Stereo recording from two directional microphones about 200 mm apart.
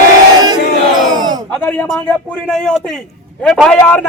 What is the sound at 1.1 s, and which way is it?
Speech, 20° right (ahead or behind).